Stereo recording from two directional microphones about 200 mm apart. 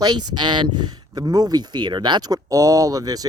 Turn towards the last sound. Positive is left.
turn(degrees=-20)  # may be behind; listen again after turning